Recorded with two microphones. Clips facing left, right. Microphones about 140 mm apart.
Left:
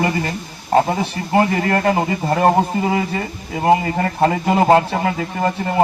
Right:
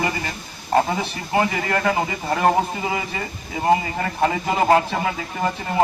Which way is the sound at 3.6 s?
45° left (ahead or behind).